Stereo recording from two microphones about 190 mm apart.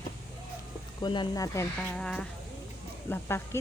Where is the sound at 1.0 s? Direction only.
25° left (ahead or behind).